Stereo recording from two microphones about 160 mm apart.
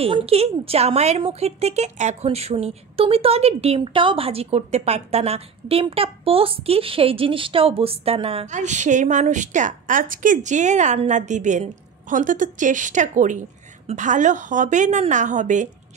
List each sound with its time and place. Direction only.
0.0 s a woman's voice: 40° right (ahead or behind)